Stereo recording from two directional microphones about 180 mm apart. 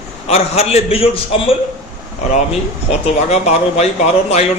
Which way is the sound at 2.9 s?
35° left (ahead or behind).